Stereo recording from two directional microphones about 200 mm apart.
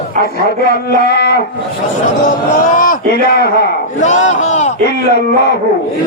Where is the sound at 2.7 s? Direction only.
45° left (ahead or behind).